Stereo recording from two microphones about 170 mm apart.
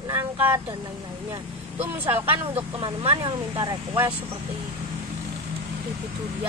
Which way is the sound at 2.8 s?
30° right (ahead or behind).